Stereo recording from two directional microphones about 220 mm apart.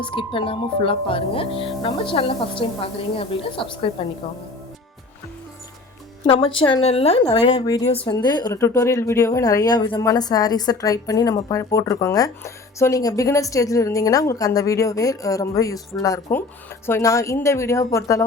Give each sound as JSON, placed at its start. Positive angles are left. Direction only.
{"t": 0.0, "sound": "speech", "side_deg": 25}
{"t": 6.2, "sound": "a woman's voice", "side_deg": 25}